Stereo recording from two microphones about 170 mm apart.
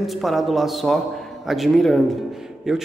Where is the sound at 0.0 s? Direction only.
Centre (ahead or behind).